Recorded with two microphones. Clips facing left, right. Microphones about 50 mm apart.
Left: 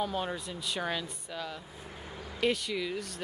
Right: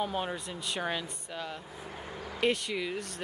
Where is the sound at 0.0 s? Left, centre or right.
Centre.